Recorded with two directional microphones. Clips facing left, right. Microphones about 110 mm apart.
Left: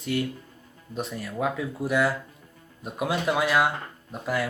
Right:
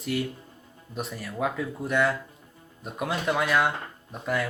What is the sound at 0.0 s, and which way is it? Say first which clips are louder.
Speech: left 1 dB; centre (ahead or behind).